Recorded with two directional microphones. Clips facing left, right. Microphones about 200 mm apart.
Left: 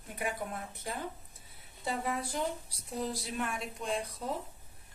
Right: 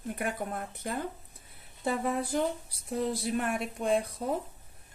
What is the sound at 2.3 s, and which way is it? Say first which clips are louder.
A woman's voice: right 5 dB; 45° right (ahead or behind).